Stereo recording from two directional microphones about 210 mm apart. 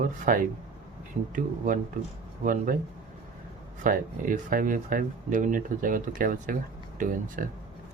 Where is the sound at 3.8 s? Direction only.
40° right (ahead or behind).